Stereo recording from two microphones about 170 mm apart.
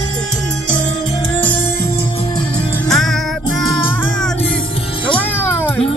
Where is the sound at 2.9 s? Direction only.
Centre (ahead or behind).